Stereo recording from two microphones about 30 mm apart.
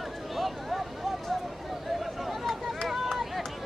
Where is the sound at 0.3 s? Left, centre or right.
Centre.